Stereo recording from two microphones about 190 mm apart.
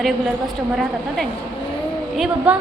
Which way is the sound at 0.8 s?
Centre (ahead or behind).